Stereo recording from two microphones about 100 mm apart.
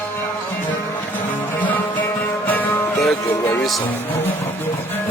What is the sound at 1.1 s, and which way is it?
Music, 15° left (ahead or behind).